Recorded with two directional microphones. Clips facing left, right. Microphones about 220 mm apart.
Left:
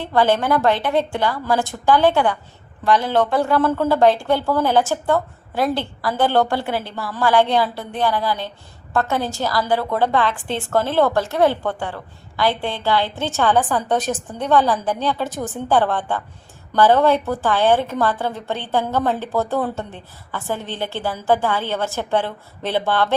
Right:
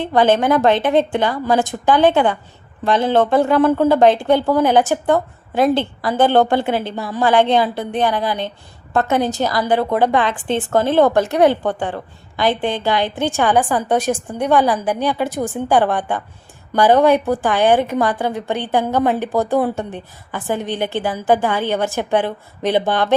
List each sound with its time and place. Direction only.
0.0 s a woman's voice: 20° right (ahead or behind)